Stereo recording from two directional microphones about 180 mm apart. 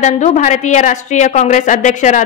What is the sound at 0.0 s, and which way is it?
A woman's voice, 40° left (ahead or behind).